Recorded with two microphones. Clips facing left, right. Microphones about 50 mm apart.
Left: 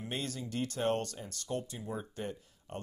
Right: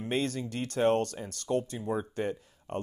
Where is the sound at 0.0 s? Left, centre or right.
Right.